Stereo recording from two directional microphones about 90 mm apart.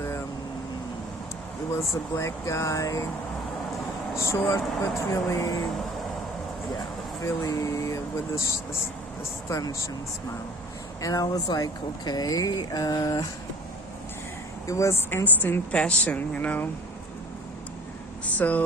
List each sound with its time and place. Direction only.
1.9 s speech: 35° left (ahead or behind)
4.2 s speech: 35° left (ahead or behind)
7.3 s speech: 40° left (ahead or behind)
9.5 s speech: 40° left (ahead or behind)
11.0 s speech: 45° left (ahead or behind)
14.7 s a woman's voice: 35° left (ahead or behind); by 16.6 s 15° left (ahead or behind)
18.3 s speech: 15° left (ahead or behind)